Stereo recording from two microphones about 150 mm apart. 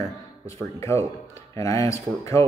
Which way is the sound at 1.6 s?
20° left (ahead or behind).